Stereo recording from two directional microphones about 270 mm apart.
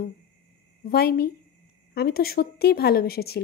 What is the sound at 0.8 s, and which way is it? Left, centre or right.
Speech, left.